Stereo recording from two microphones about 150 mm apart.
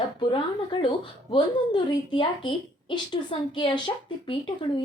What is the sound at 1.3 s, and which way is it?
Speech, 35° left (ahead or behind).